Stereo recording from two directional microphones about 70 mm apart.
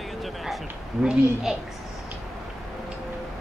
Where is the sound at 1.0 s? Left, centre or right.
Centre.